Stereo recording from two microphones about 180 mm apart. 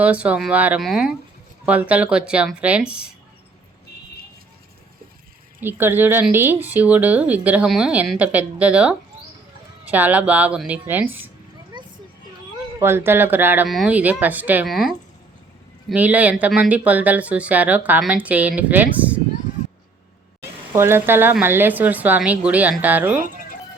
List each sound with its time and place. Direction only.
0.0 s speech: 10° right (ahead or behind)
5.5 s speech: 10° right (ahead or behind)
11.7 s a sound: 25° right (ahead or behind)
12.8 s speech: 15° right (ahead or behind)
20.7 s speech: 15° right (ahead or behind)